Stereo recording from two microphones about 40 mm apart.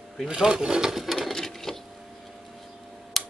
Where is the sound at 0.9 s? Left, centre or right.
Centre.